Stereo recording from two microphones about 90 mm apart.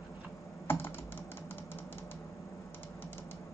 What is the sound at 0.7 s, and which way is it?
Computer keyboard, 25° left (ahead or behind).